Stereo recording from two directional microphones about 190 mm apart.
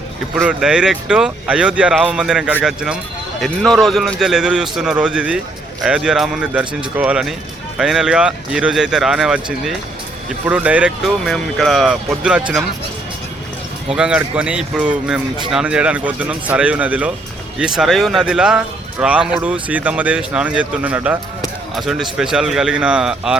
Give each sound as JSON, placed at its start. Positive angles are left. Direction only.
{"t": 0.3, "sound": "speech", "side_deg": -5}
{"t": 13.9, "sound": "speech", "side_deg": -5}